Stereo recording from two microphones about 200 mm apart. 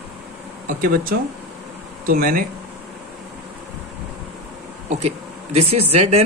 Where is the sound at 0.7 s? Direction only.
45° right (ahead or behind).